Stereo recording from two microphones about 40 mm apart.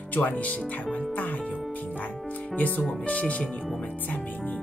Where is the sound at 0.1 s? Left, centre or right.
Left.